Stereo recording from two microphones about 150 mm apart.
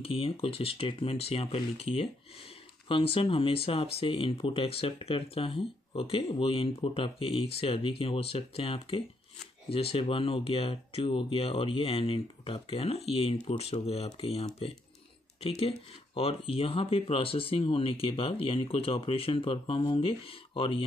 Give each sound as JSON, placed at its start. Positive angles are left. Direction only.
{"t": 0.0, "sound": "speech", "side_deg": 40}
{"t": 16.2, "sound": "speech", "side_deg": 40}